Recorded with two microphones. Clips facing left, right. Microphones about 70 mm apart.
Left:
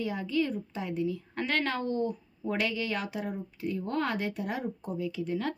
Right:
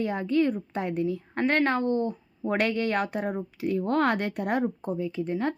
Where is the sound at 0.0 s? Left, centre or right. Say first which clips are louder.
Right 5 dB; right.